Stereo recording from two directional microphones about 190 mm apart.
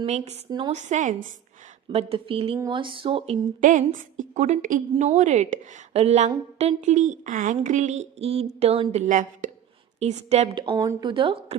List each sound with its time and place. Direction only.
0.0 s a woman's voice: 30° right (ahead or behind)
3.6 s a woman's voice: 45° right (ahead or behind); by 11.5 s 30° right (ahead or behind)